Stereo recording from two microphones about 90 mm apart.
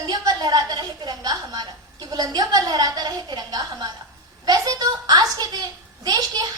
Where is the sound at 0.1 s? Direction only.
50° right (ahead or behind).